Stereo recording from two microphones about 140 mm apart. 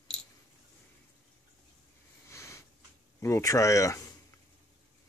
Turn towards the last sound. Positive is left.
turn(degrees=20)  # may be behind; listen again after turning